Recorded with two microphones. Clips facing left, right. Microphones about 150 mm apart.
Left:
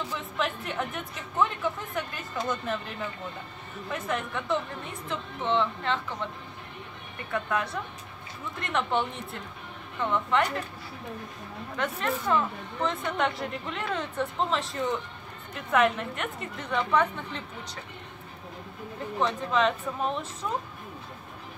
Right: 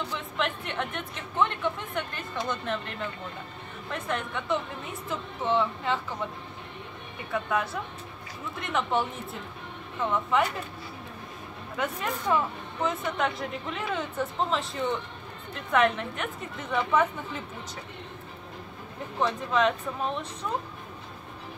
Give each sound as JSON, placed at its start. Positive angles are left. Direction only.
{"t": 0.0, "sound": "a woman's voice", "side_deg": 5}
{"t": 7.3, "sound": "speech", "side_deg": -5}
{"t": 11.7, "sound": "speech", "side_deg": -10}
{"t": 19.1, "sound": "speech", "side_deg": 0}